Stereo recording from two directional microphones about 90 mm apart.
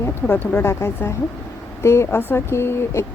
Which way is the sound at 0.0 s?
20° left (ahead or behind).